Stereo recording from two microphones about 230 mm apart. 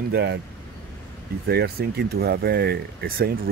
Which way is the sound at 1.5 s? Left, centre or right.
Right.